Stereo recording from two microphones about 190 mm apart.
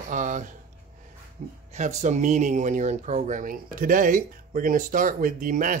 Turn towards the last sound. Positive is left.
turn(degrees=-45)  # may be behind; listen again after turning